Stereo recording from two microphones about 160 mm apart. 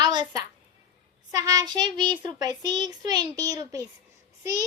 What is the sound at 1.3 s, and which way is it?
A child's voice, 25° right (ahead or behind).